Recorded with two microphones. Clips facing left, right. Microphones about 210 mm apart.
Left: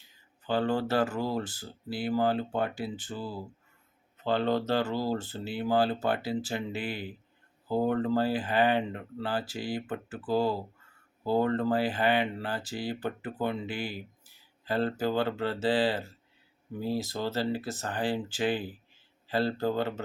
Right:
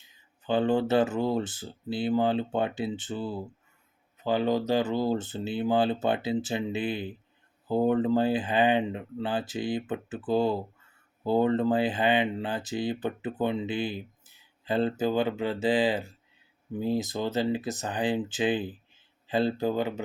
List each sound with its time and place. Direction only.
0.4 s speech: 20° right (ahead or behind)